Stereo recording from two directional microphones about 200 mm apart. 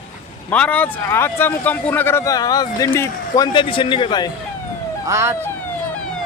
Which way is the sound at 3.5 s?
25° left (ahead or behind).